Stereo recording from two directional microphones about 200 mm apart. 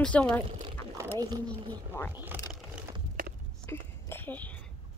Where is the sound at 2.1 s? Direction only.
10° right (ahead or behind).